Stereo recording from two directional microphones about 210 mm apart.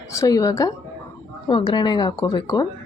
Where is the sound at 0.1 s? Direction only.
15° left (ahead or behind).